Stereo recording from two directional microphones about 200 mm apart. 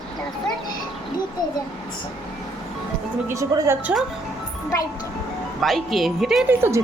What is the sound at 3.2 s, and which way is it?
Speech, 15° right (ahead or behind).